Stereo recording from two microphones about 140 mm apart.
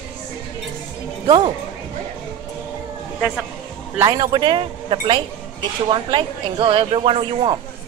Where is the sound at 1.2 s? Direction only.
35° right (ahead or behind).